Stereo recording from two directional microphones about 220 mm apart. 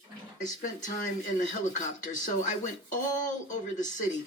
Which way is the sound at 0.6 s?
35° left (ahead or behind).